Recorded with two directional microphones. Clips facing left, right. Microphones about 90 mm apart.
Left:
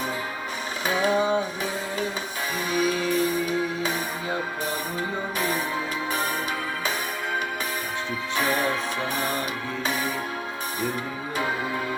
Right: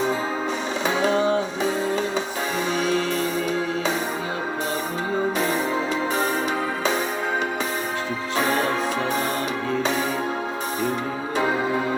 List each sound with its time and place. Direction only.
0.9 s music: 25° right (ahead or behind)
2.7 s music: 25° right (ahead or behind)
3.0 s music: 15° left (ahead or behind)
5.4 s music: 25° right (ahead or behind)
8.4 s music: 25° right (ahead or behind)
11.3 s music: 25° right (ahead or behind)